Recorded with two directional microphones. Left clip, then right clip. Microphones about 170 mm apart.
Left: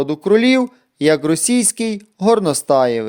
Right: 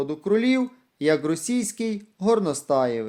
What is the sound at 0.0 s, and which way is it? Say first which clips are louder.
Speech: left 9 dB; 50° left (ahead or behind).